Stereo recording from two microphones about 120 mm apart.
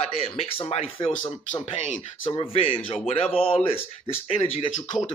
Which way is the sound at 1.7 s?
70° left (ahead or behind).